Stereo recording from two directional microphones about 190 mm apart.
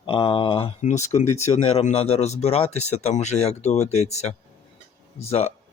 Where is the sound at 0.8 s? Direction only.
40° left (ahead or behind).